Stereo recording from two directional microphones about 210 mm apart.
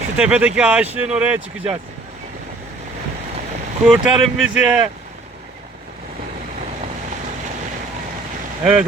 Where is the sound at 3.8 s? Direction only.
Centre (ahead or behind).